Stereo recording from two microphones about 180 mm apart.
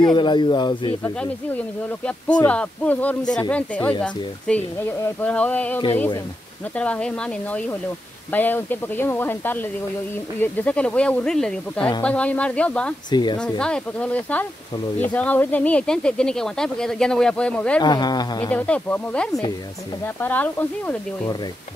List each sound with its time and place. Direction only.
0.0 s speech: 25° left (ahead or behind)
2.0 s speech: 5° left (ahead or behind)
4.8 s speech: 15° left (ahead or behind)
6.8 s speech: 5° left (ahead or behind)
13.1 s speech: 25° left (ahead or behind)
13.4 s speech: 5° left (ahead or behind)
17.8 s speech: 25° left (ahead or behind)
18.5 s speech: 5° left (ahead or behind)